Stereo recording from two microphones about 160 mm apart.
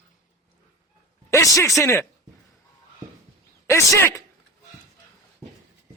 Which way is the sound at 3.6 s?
20° left (ahead or behind).